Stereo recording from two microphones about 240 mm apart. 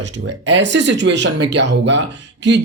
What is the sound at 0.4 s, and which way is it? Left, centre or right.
Speech, right.